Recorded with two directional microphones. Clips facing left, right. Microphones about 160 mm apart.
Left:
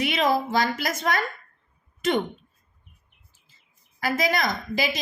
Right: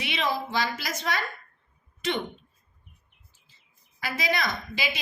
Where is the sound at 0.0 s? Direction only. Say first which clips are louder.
Left 6 dB; 45° left (ahead or behind).